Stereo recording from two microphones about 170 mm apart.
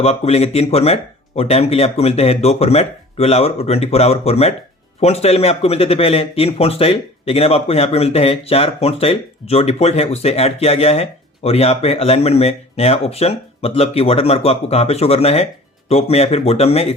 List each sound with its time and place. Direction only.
0.0 s speech: 35° left (ahead or behind)